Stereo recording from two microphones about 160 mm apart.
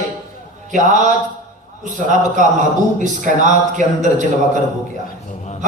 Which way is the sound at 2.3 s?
50° right (ahead or behind).